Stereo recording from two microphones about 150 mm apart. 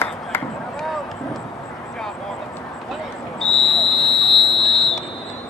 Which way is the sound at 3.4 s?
5° left (ahead or behind).